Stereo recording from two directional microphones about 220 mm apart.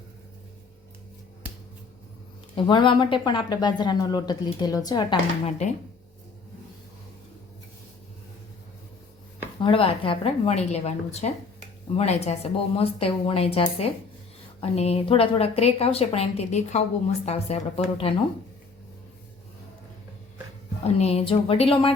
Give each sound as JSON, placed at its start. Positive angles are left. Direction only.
{"t": 2.6, "sound": "a woman's voice", "side_deg": 20}
{"t": 5.5, "sound": "speech", "side_deg": 35}
{"t": 9.6, "sound": "a woman's voice", "side_deg": 25}
{"t": 20.8, "sound": "a woman's voice", "side_deg": 30}